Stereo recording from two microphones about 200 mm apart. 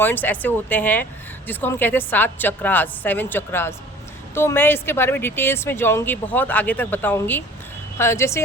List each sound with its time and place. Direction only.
0.0 s speech: 10° left (ahead or behind)